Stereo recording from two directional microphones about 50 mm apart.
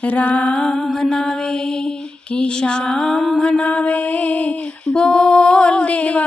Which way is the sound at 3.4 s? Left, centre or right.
Centre.